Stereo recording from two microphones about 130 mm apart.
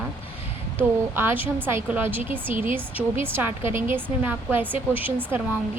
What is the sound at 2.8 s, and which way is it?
A woman's voice, 15° right (ahead or behind).